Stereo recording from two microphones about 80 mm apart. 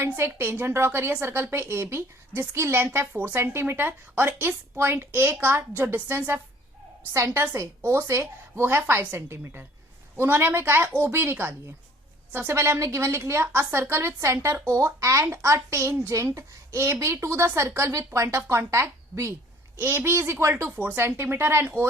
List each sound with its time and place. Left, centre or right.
0.0 s a child's voice: right
19.8 s a child's voice: right
20.7 s a woman's voice: right